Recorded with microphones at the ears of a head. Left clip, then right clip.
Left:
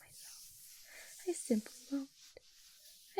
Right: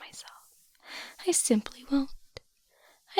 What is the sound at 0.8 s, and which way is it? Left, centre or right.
Whispering, right.